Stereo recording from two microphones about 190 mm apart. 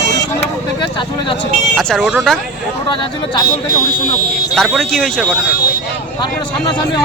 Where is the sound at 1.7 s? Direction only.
Centre (ahead or behind).